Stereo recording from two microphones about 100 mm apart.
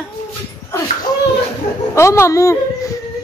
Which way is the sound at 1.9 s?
30° left (ahead or behind).